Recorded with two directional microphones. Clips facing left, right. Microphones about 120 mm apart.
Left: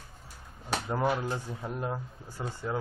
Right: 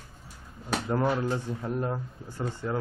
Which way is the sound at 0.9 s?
10° left (ahead or behind).